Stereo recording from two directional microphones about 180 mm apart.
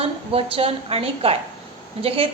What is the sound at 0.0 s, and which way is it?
A woman's voice, 30° right (ahead or behind).